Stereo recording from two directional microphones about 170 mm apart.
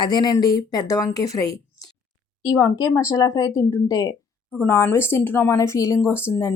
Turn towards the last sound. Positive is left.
turn(degrees=15)  # may be behind; listen again after turning